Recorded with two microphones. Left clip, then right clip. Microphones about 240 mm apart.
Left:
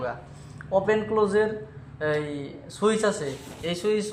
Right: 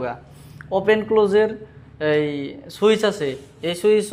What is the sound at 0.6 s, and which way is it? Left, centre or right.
A man's voice, right.